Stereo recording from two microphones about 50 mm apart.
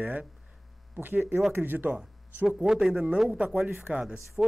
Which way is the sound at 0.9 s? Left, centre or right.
Right.